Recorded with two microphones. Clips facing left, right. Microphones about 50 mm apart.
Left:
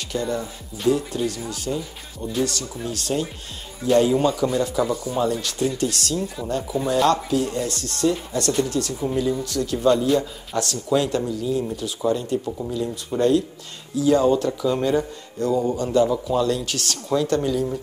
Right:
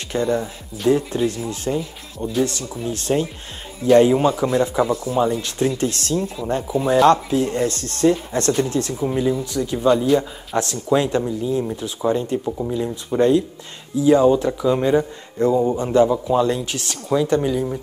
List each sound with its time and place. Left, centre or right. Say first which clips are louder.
0.1 s speech: right 5 dB; right